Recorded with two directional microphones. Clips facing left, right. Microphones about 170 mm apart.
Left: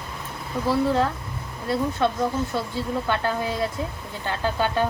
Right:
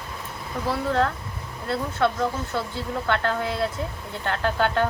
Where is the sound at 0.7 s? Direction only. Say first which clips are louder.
Left 2 dB; 10° left (ahead or behind).